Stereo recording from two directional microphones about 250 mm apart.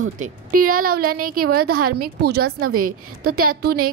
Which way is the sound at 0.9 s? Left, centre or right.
Right.